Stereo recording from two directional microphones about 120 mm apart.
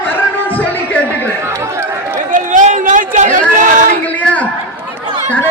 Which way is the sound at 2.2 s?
90° right.